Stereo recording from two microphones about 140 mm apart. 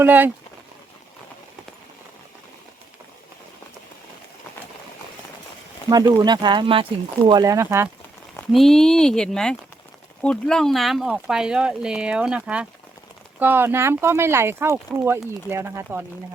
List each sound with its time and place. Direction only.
0.0 s speech: 15° right (ahead or behind)
5.9 s speech: 30° right (ahead or behind)
8.5 s speech: 5° left (ahead or behind); by 16.0 s 15° right (ahead or behind)